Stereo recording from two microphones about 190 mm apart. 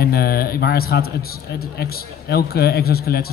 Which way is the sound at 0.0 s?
55° left (ahead or behind).